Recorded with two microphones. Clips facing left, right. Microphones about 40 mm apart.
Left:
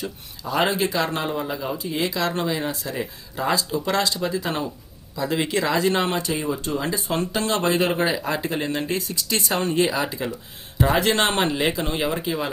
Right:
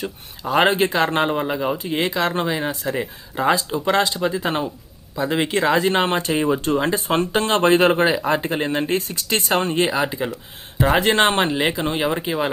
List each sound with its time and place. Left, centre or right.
0.4 s speech: right
10.0 s speech: centre
10.8 s speech: right